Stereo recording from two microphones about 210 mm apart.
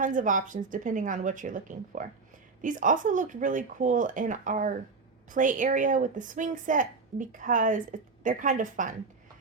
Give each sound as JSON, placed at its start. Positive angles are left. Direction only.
{"t": 0.0, "sound": "a woman's voice", "side_deg": -40}